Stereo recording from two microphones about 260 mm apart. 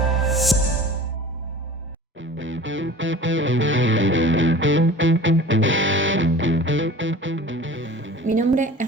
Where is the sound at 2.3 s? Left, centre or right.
Right.